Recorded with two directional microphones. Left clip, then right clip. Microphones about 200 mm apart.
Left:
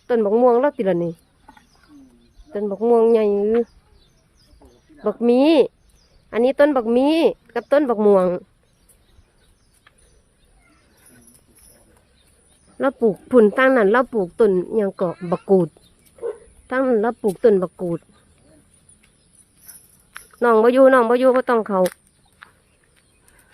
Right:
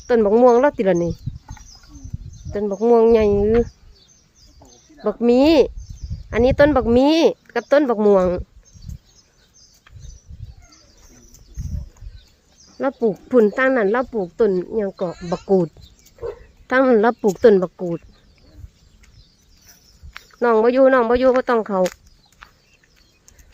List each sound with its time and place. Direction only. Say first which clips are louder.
0.1 s speech: right 2 dB; 15° right (ahead or behind)
4.9 s speech: right 1 dB; centre (ahead or behind)
12.8 s speech: left 1 dB; 10° left (ahead or behind); by 15.2 s 30° left (ahead or behind)
15.4 s speech: left 1 dB; 5° left (ahead or behind)
16.6 s speech: right 4 dB; 15° right (ahead or behind)
17.6 s speech: right 1 dB; centre (ahead or behind)
20.1 s a sound: even; centre (ahead or behind)
20.5 s speech: left 1 dB; 15° left (ahead or behind)
22.4 s a sound: even; 5° right (ahead or behind)